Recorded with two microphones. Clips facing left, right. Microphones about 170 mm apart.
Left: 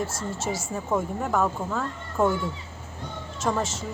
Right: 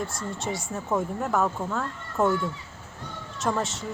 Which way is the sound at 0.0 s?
Centre (ahead or behind).